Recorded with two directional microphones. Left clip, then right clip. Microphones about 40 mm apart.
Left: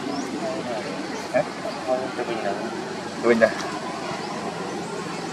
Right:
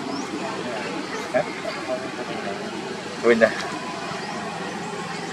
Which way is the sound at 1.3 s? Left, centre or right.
Centre.